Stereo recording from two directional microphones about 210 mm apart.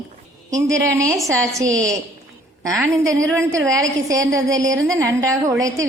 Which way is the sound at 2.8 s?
15° right (ahead or behind).